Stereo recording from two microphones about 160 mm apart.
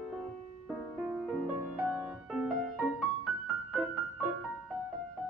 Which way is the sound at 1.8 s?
10° right (ahead or behind).